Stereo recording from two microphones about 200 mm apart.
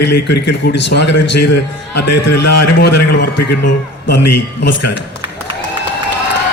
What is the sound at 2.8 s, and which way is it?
Speech, 50° left (ahead or behind).